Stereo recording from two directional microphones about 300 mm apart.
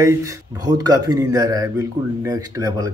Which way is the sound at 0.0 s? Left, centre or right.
Centre.